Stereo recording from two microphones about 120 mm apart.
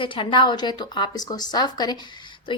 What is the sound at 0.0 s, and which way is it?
A woman's voice, 45° left (ahead or behind).